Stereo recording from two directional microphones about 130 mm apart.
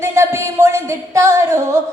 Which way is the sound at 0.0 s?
20° right (ahead or behind).